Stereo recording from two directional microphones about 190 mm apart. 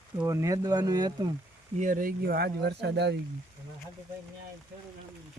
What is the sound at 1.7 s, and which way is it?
Speech, 45° right (ahead or behind).